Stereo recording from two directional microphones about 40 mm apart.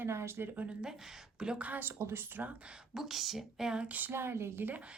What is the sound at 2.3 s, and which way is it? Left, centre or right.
Speech, right.